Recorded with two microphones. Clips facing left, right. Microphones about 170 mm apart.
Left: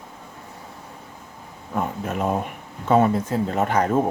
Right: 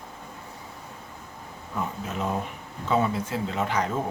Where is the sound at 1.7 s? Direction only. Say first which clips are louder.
Left 5 dB; 55° left (ahead or behind).